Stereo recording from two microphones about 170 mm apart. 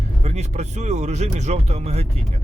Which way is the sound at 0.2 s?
40° right (ahead or behind).